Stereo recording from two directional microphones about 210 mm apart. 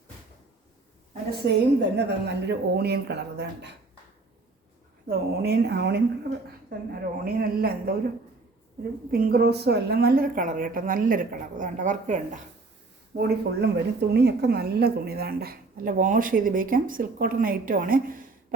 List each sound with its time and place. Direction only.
1.3 s a woman's voice: 55° right (ahead or behind)
5.0 s a woman's voice: 50° right (ahead or behind)
9.1 s a woman's voice: 45° right (ahead or behind)
13.1 s a woman's voice: 50° right (ahead or behind)